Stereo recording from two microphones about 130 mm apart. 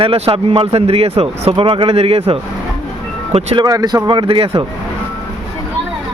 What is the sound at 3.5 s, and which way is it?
Speech, 30° right (ahead or behind).